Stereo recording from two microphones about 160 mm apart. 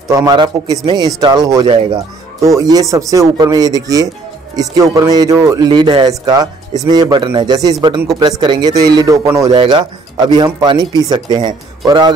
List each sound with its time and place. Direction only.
0.1 s speech: 25° right (ahead or behind)
9.5 s speech: 30° right (ahead or behind)